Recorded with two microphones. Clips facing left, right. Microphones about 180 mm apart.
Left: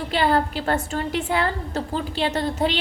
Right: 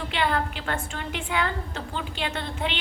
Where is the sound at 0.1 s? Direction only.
35° left (ahead or behind).